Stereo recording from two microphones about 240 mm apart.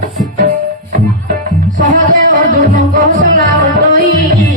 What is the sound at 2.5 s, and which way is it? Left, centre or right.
Music, right.